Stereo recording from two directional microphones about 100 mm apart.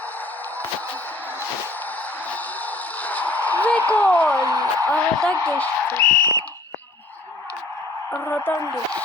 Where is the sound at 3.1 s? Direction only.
15° left (ahead or behind).